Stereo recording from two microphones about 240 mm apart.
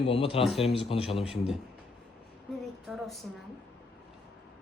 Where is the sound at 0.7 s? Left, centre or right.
Left.